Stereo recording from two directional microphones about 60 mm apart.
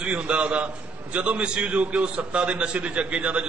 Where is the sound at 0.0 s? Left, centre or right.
Centre.